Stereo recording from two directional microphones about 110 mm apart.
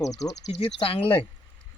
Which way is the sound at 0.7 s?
55° left (ahead or behind).